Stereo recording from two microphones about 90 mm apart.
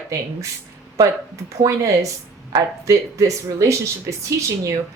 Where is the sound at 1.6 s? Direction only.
35° right (ahead or behind).